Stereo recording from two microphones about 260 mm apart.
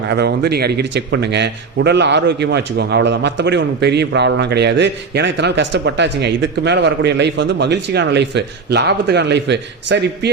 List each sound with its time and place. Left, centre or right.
0.1 s speech: right